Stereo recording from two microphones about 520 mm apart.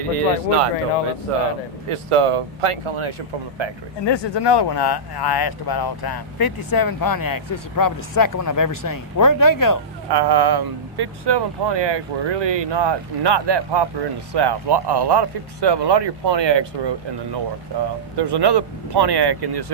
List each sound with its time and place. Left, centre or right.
0.0 s speech: right
1.9 s speech: right
4.0 s speech: left
10.1 s speech: right